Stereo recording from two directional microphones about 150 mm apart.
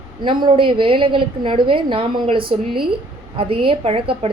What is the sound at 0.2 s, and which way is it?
A woman's voice, 30° right (ahead or behind).